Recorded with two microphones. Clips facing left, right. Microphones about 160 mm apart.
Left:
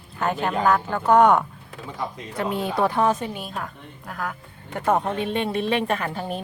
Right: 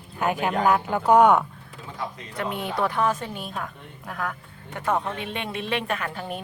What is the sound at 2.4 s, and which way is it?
Speech, 30° left (ahead or behind).